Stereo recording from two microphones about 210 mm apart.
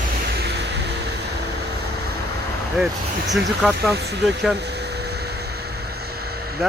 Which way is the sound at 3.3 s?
Centre (ahead or behind).